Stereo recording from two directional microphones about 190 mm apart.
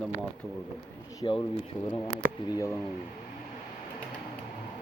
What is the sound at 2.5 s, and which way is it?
Speech, 15° left (ahead or behind).